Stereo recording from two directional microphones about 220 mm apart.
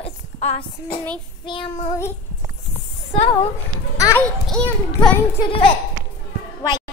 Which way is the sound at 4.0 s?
15° left (ahead or behind).